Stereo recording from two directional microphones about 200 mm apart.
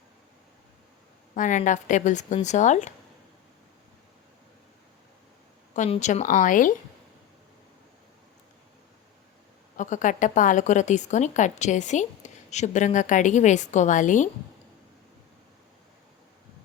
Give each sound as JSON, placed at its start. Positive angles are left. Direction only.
{"t": 1.4, "sound": "a woman's voice", "side_deg": 40}
{"t": 5.7, "sound": "a woman's voice", "side_deg": 35}
{"t": 9.7, "sound": "a woman's voice", "side_deg": 40}